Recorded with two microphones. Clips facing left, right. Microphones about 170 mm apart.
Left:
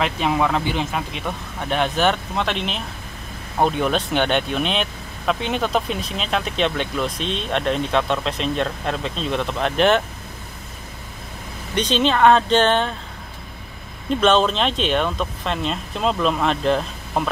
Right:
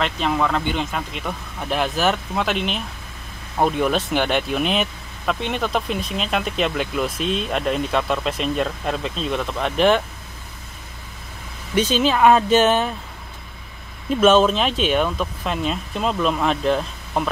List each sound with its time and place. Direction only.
0.0 s speech: 5° left (ahead or behind)
11.7 s speech: 5° right (ahead or behind)
14.2 s speech: 5° right (ahead or behind)